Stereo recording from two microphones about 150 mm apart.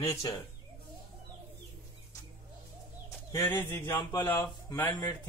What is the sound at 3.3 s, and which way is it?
Bird, 15° left (ahead or behind).